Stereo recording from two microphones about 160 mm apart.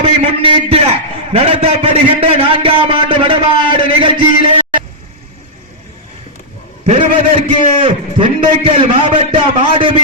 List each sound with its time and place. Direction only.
0.0 s a man's voice: 40° right (ahead or behind)
6.8 s a man's voice: 40° right (ahead or behind)